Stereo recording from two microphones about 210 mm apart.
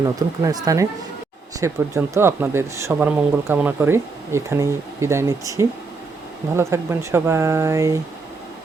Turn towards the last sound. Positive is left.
turn(degrees=-15)  # may be behind; listen again after turning